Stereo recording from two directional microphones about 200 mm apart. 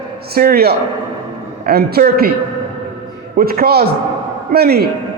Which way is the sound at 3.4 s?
50° right (ahead or behind).